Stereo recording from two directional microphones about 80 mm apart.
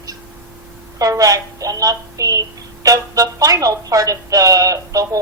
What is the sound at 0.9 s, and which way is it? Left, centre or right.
Speech, right.